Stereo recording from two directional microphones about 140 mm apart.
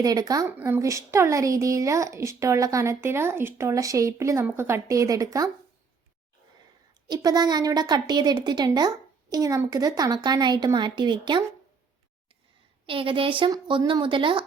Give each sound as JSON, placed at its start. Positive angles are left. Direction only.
{"t": 0.0, "sound": "a woman's voice", "side_deg": -25}
{"t": 7.1, "sound": "a woman's voice", "side_deg": -30}
{"t": 12.8, "sound": "a woman's voice", "side_deg": -40}